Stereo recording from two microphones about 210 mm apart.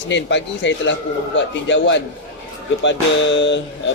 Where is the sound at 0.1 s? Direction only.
60° left (ahead or behind).